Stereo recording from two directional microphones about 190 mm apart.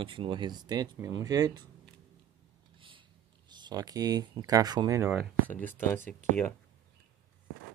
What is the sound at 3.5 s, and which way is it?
Speech, 20° right (ahead or behind).